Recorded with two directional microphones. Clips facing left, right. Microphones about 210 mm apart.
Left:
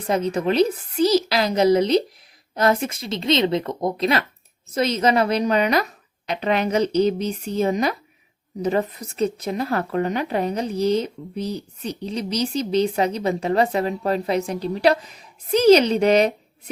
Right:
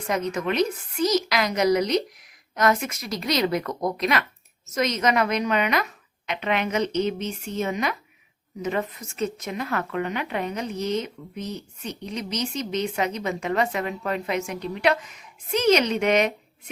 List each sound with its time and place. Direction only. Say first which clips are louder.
0.1 s speech: left 5 dB; 30° left (ahead or behind)